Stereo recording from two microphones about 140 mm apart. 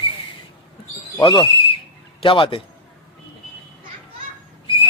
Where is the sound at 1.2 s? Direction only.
40° left (ahead or behind).